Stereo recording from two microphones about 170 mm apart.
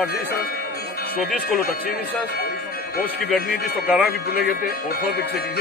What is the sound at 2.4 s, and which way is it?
Music, 65° left (ahead or behind).